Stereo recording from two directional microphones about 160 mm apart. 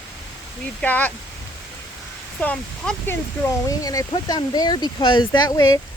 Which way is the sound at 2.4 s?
10° left (ahead or behind).